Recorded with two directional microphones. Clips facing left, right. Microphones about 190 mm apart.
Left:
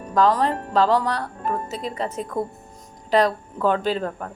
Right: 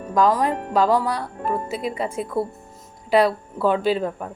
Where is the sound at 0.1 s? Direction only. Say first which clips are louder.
Even; 10° right (ahead or behind).